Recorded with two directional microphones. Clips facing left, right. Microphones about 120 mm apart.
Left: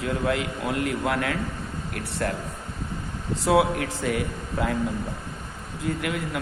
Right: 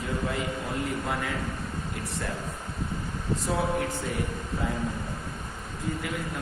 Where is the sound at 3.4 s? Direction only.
90° left.